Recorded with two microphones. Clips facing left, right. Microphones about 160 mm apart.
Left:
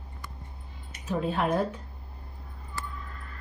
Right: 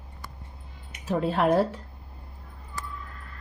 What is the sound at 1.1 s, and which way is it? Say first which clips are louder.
Speech: right 4 dB; 80° right.